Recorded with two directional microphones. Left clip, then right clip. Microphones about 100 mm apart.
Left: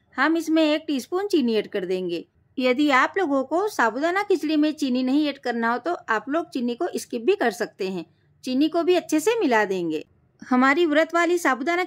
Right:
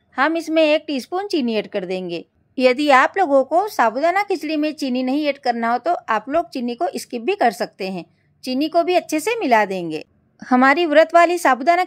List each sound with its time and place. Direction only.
0.1 s a woman's voice: 25° right (ahead or behind)
2.5 s a woman's voice: 40° right (ahead or behind)
10.5 s speech: 40° right (ahead or behind)